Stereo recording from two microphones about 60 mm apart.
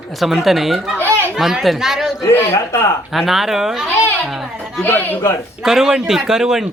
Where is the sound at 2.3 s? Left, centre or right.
Left.